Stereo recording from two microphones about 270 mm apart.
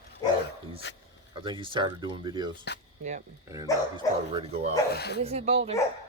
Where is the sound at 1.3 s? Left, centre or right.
Centre.